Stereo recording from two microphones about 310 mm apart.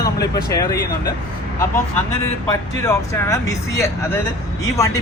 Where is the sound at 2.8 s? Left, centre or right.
Centre.